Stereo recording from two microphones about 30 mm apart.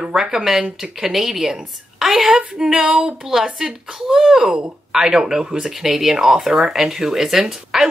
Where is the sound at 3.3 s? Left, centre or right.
Centre.